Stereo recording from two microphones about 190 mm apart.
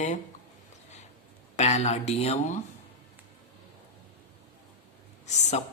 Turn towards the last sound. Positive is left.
turn(degrees=35)  # may be behind; listen again after turning